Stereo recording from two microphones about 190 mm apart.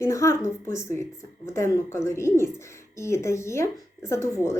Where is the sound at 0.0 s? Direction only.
15° left (ahead or behind).